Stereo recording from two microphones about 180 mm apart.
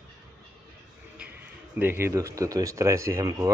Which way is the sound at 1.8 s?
15° right (ahead or behind).